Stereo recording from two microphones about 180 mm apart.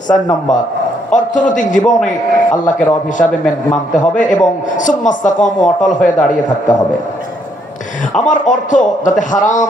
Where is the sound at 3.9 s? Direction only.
45° left (ahead or behind).